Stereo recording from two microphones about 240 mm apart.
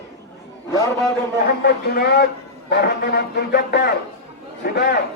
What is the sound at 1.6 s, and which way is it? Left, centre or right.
A man's voice, left.